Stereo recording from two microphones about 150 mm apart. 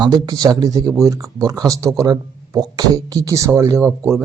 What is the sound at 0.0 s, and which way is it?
Speech, 30° right (ahead or behind).